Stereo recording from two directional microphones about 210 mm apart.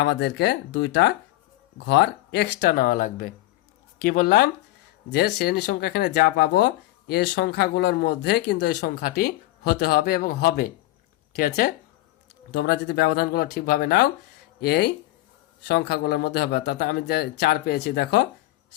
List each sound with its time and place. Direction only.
0.0 s speech: 55° left (ahead or behind)